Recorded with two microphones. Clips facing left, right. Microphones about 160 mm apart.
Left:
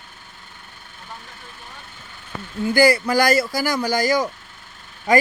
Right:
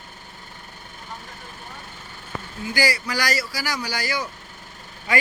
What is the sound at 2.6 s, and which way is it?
Speech, 55° left (ahead or behind).